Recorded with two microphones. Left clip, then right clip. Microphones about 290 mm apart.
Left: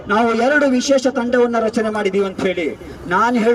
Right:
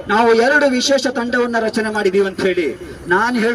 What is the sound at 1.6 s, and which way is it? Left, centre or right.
A man's voice, centre.